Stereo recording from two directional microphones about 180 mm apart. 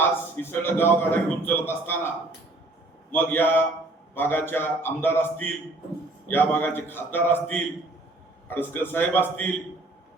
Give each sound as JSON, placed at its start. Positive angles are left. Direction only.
{"t": 0.4, "sound": "a man's voice", "side_deg": 10}
{"t": 3.1, "sound": "a man's voice", "side_deg": 10}